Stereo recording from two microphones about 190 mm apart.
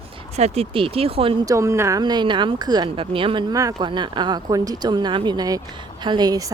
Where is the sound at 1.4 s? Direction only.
15° right (ahead or behind).